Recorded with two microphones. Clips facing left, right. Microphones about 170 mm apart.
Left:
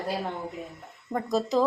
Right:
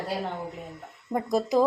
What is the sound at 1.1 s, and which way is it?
Speech, 15° right (ahead or behind).